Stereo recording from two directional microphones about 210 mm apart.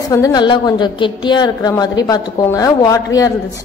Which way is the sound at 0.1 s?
15° left (ahead or behind).